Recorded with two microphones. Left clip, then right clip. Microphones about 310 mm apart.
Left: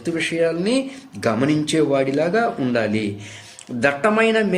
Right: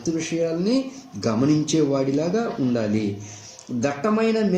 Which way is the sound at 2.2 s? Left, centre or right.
Left.